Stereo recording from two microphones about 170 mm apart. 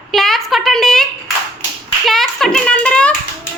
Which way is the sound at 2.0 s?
Centre (ahead or behind).